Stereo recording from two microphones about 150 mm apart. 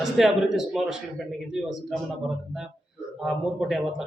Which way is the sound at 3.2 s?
Centre (ahead or behind).